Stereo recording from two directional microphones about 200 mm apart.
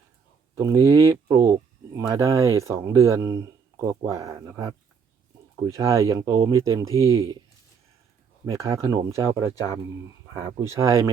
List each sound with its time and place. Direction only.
0.5 s speech: 15° right (ahead or behind)
8.4 s speech: 15° right (ahead or behind)